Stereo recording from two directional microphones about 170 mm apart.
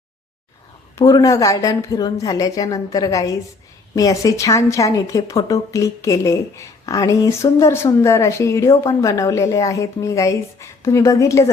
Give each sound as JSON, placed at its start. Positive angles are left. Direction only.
{"t": 0.9, "sound": "a woman's voice", "side_deg": 20}